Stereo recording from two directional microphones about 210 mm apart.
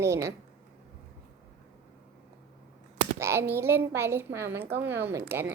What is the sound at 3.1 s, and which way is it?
A woman's voice, 10° right (ahead or behind).